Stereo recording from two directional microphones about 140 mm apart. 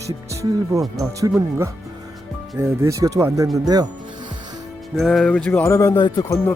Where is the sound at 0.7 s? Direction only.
25° right (ahead or behind).